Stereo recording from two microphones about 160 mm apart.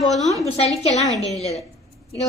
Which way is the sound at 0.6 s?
40° left (ahead or behind).